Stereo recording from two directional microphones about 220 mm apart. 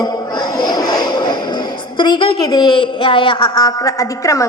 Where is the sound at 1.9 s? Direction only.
20° left (ahead or behind).